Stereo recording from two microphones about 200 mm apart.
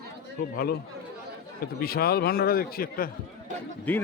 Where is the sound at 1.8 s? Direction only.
50° left (ahead or behind).